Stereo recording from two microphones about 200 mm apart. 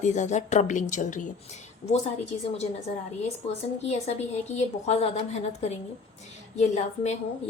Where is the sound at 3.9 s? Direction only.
35° left (ahead or behind).